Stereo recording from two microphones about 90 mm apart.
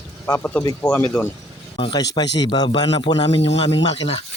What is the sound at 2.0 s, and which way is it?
Speech, 50° left (ahead or behind).